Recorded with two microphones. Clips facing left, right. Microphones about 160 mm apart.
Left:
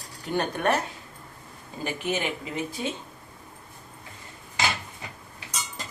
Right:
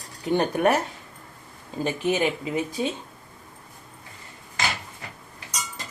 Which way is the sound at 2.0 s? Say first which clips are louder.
Right 5 dB; 20° right (ahead or behind).